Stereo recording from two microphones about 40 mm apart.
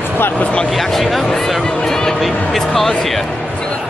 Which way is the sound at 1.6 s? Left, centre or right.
Centre.